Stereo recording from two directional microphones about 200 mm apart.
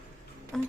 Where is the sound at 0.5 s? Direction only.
Centre (ahead or behind).